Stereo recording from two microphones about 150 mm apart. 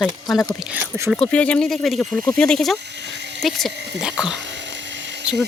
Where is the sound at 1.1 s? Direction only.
5° left (ahead or behind).